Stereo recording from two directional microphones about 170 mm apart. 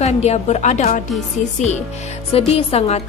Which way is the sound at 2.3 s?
35° left (ahead or behind).